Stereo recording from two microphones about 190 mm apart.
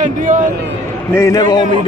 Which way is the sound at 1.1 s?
15° left (ahead or behind).